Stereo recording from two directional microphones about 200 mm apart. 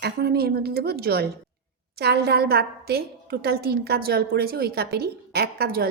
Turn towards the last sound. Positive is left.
turn(degrees=-50)  # may be behind; listen again after turning